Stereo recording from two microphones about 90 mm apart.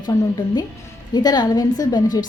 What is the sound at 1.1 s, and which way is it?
A woman's voice, 50° left (ahead or behind).